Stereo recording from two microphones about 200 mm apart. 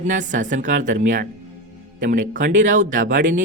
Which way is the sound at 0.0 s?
40° right (ahead or behind).